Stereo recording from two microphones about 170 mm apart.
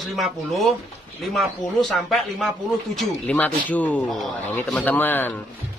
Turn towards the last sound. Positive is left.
turn(degrees=10)  # may be behind; listen again after turning